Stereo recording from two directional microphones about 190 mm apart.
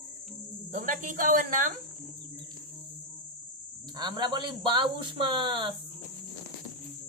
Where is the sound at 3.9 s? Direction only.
20° right (ahead or behind).